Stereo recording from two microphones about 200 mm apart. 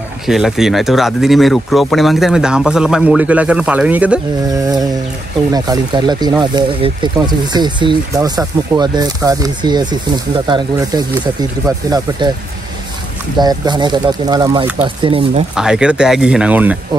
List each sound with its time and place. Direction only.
0.3 s speech: centre (ahead or behind)
5.5 s speech: 20° right (ahead or behind)
13.4 s speech: 20° right (ahead or behind)
15.5 s speech: 5° right (ahead or behind)